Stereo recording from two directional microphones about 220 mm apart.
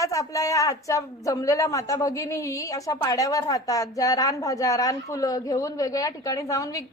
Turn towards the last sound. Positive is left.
turn(degrees=15)  # may be behind; listen again after turning